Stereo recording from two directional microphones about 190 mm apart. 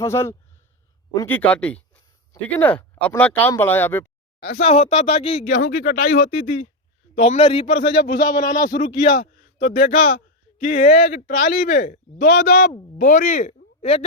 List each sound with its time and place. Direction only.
0.0 s speech: 15° left (ahead or behind)
4.4 s speech: 55° left (ahead or behind)
4.6 s speech: 35° left (ahead or behind)
5.5 s speech: 50° left (ahead or behind)
6.4 s a man's voice: 35° left (ahead or behind); by 8.6 s 20° left (ahead or behind)
8.6 s speech: 45° left (ahead or behind)